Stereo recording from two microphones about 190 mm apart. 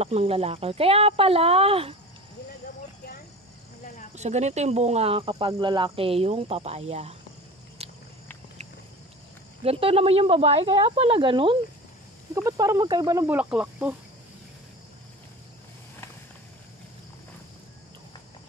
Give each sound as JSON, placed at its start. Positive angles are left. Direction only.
{"t": 0.0, "sound": "speech", "side_deg": -30}
{"t": 4.1, "sound": "speech", "side_deg": -35}
{"t": 7.8, "sound": "walk", "side_deg": -30}
{"t": 9.6, "sound": "a woman's voice", "side_deg": -30}